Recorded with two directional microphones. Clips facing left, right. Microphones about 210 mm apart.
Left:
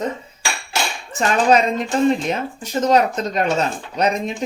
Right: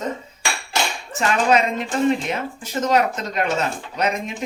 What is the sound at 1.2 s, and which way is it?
Speech, 40° left (ahead or behind).